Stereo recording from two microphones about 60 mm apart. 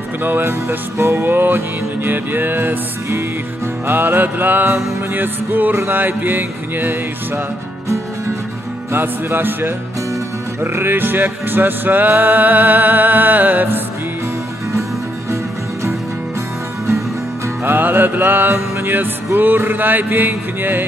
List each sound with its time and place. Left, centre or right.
0.2 s music: right
1.2 s music: right
3.8 s music: right
8.9 s music: right
17.6 s music: right